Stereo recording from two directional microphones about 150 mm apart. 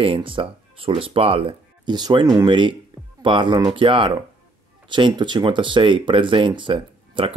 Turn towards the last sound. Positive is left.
turn(degrees=-35)  # may be behind; listen again after turning